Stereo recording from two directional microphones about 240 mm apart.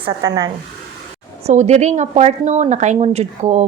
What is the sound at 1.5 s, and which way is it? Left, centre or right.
A woman's voice, right.